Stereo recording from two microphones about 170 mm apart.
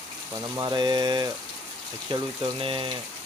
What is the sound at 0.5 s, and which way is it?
Speech, 25° right (ahead or behind).